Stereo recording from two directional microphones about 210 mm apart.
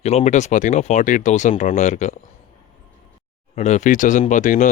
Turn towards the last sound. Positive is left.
turn(degrees=35)  # may be behind; listen again after turning